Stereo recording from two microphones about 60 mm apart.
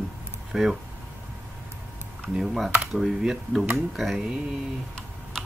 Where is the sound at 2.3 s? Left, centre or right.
Centre.